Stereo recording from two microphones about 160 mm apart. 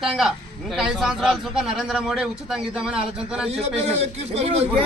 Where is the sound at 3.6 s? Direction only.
40° right (ahead or behind).